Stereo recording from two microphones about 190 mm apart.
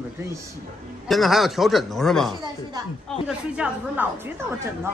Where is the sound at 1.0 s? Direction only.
Centre (ahead or behind).